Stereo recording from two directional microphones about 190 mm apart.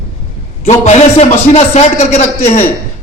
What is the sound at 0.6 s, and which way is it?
A man's voice, 35° left (ahead or behind).